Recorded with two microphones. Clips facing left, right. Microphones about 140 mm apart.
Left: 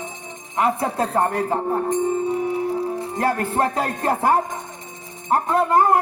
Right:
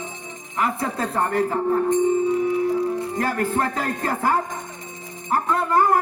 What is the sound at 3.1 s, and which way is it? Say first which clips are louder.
A man's voice: left 5 dB; 25° left (ahead or behind).